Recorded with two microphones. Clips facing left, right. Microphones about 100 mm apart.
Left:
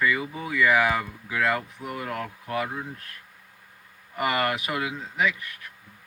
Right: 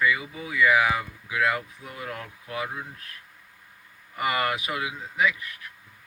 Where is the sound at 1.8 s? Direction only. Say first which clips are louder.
Left 5 dB; 45° left (ahead or behind).